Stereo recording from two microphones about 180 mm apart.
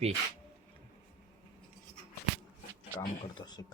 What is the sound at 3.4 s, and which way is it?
Speech, 20° left (ahead or behind).